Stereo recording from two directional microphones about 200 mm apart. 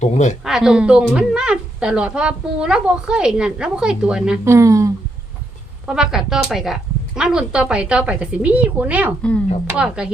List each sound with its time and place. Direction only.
0.0 s speech: 35° left (ahead or behind)
0.4 s speech: 5° right (ahead or behind)
4.5 s speech: 15° right (ahead or behind)
5.8 s speech: 5° right (ahead or behind)